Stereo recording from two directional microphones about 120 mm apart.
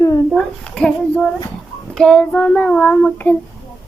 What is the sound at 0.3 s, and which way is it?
Speech, 5° left (ahead or behind).